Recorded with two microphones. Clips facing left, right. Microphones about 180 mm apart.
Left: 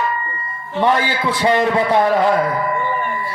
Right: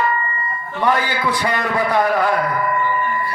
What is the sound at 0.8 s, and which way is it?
A man's voice, 25° left (ahead or behind).